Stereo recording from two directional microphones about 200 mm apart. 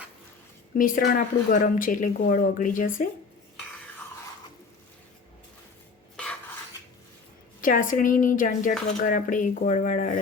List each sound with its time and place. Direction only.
0.8 s speech: 45° left (ahead or behind)
7.6 s speech: 40° left (ahead or behind)